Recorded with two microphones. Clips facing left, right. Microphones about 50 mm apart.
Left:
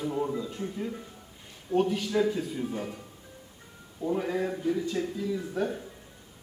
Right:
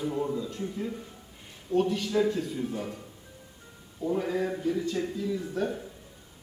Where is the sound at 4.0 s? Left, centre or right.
Centre.